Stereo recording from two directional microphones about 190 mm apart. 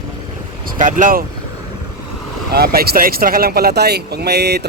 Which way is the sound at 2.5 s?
55° right (ahead or behind).